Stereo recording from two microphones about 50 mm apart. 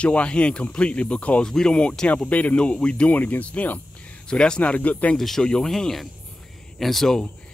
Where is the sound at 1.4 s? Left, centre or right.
Centre.